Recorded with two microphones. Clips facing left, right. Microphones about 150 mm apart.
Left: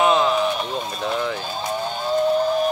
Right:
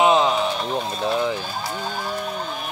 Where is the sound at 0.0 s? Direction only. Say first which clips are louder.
Even; 20° right (ahead or behind).